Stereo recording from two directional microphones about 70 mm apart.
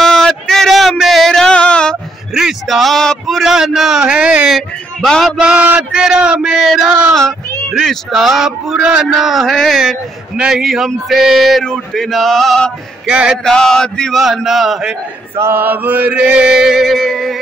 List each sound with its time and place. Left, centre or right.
0.0 s a sound: centre
2.3 s a sound: centre
4.1 s chant: centre
4.5 s a sound: centre
5.4 s chant: centre
7.7 s a man's voice: centre
13.0 s chant: centre
13.4 s chant: centre
14.2 s a man's voice: centre
15.5 s chant: right; by 17.4 s centre